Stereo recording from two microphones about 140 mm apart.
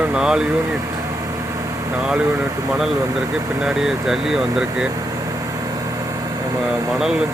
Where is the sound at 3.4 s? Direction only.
20° right (ahead or behind).